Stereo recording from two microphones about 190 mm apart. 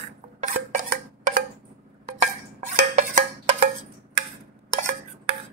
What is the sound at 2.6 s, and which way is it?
Music, 45° right (ahead or behind).